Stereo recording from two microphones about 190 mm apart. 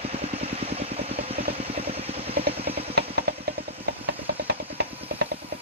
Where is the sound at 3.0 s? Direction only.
60° right (ahead or behind).